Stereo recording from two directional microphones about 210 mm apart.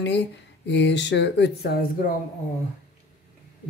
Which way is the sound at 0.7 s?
55° left (ahead or behind).